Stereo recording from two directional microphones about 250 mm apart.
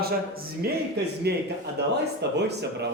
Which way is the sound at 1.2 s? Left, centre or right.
Right.